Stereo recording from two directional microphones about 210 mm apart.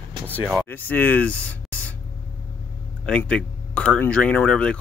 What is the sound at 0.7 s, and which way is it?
Speech, 10° left (ahead or behind).